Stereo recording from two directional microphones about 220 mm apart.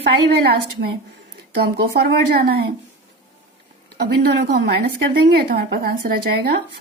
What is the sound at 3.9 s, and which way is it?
A woman's voice, 50° right (ahead or behind).